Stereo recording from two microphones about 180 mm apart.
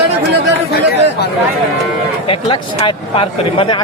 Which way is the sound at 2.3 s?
30° left (ahead or behind).